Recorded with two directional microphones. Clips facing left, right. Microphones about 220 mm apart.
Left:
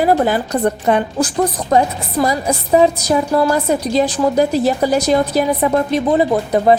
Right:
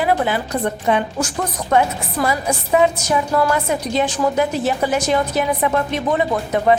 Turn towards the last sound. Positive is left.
turn(degrees=35)  # may be behind; listen again after turning